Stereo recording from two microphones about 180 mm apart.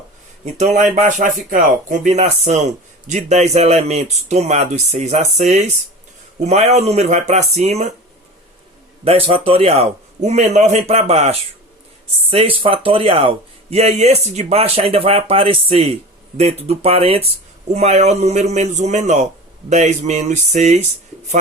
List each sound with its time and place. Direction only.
0.5 s speech: 40° right (ahead or behind)
9.0 s speech: 30° right (ahead or behind)